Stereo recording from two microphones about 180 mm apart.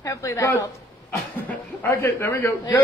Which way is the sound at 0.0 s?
15° left (ahead or behind).